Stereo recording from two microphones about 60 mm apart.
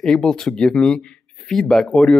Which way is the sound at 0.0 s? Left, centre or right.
Centre.